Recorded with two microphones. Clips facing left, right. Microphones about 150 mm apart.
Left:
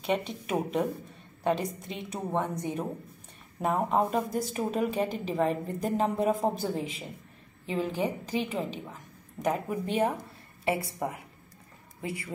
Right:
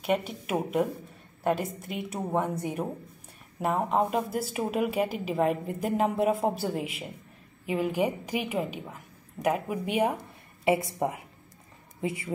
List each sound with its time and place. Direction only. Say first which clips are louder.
0.0 s a woman's voice: right 2 dB; 5° right (ahead or behind); by 12.3 s 20° right (ahead or behind)